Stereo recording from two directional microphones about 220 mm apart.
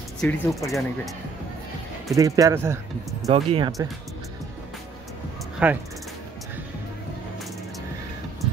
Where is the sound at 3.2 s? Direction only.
25° right (ahead or behind).